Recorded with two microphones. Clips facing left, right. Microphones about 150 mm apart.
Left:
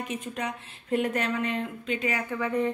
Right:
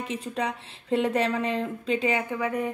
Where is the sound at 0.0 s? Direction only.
30° right (ahead or behind).